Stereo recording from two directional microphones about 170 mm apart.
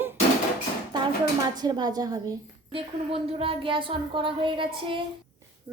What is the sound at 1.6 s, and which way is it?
Speech, 25° right (ahead or behind).